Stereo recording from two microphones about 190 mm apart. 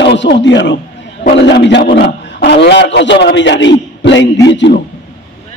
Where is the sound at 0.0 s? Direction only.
65° left (ahead or behind).